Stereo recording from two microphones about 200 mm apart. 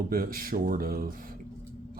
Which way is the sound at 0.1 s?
45° right (ahead or behind).